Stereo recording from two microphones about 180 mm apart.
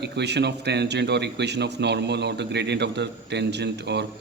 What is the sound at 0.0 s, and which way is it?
Speech, 70° right (ahead or behind).